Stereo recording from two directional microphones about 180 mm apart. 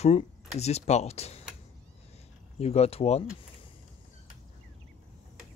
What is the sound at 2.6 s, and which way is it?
Speech, 35° left (ahead or behind).